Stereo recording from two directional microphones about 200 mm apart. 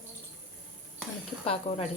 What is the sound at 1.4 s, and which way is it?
Speech, 30° left (ahead or behind).